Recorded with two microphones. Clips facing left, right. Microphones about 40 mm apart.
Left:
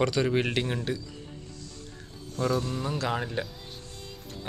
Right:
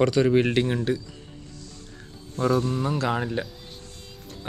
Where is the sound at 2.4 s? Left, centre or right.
Centre.